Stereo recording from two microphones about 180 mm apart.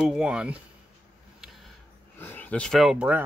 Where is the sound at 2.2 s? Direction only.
10° left (ahead or behind); by 3.2 s 5° right (ahead or behind).